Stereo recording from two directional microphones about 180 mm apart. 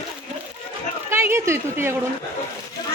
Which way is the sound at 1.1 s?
15° right (ahead or behind).